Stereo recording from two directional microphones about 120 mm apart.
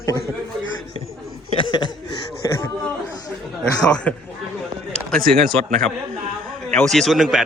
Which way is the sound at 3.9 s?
10° left (ahead or behind).